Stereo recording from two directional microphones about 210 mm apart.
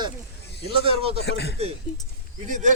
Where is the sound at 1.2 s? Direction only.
55° left (ahead or behind).